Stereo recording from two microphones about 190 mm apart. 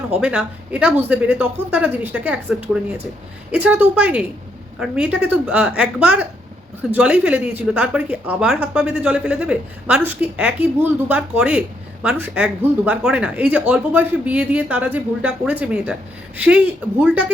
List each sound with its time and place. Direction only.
0.2 s a woman's voice: 5° right (ahead or behind)
17.0 s a woman's voice: 10° right (ahead or behind)